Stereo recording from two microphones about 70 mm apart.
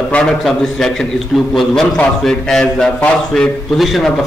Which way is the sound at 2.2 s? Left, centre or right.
Centre.